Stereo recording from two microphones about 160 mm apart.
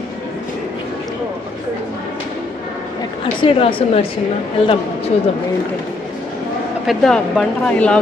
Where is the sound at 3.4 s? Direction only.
35° left (ahead or behind).